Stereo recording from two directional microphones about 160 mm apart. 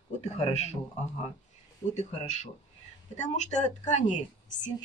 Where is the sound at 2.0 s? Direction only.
45° left (ahead or behind).